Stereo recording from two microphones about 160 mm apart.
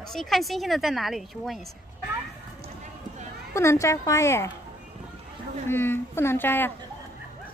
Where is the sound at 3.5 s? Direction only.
20° left (ahead or behind).